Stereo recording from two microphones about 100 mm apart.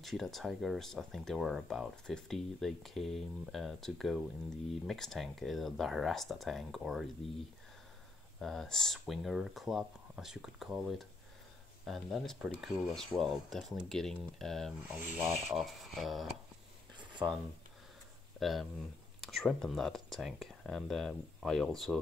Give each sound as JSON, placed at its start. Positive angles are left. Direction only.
{"t": 0.0, "sound": "speech", "side_deg": 0}
{"t": 8.4, "sound": "speech", "side_deg": 0}
{"t": 14.9, "sound": "speech", "side_deg": -20}
{"t": 15.5, "sound": "speech", "side_deg": 0}
{"t": 18.4, "sound": "speech", "side_deg": 0}